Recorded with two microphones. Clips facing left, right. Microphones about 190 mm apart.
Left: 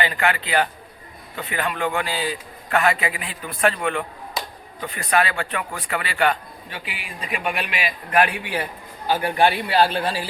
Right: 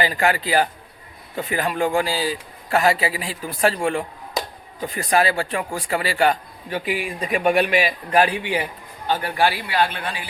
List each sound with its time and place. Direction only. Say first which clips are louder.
0.0 s a man's voice: right 2 dB; 35° right (ahead or behind)
9.0 s a man's voice: left 2 dB; 15° left (ahead or behind); by 10.2 s 35° left (ahead or behind)